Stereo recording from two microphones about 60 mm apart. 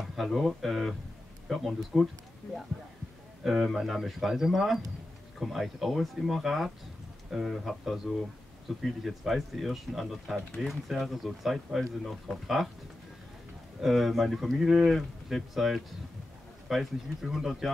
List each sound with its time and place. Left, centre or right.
0.0 s speech: centre
3.4 s speech: centre
13.7 s speech: centre